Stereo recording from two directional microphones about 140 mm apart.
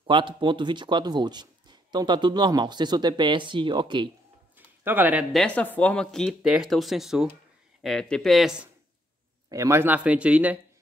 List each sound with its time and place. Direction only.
0.0 s speech: 35° right (ahead or behind)
4.6 s a sound: 15° right (ahead or behind)
5.3 s speech: 5° left (ahead or behind)
9.5 s speech: 20° right (ahead or behind)